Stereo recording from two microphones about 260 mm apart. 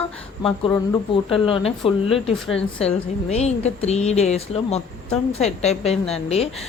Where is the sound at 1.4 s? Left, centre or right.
Centre.